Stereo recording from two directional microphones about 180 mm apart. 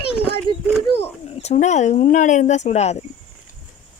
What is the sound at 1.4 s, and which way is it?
Speech, 40° left (ahead or behind).